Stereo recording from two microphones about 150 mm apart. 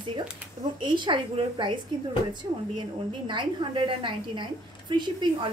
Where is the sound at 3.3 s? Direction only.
35° right (ahead or behind).